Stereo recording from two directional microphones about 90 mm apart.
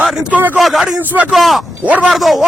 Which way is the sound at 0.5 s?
Centre (ahead or behind).